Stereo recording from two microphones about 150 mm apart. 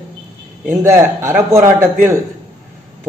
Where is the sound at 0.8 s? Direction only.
15° right (ahead or behind).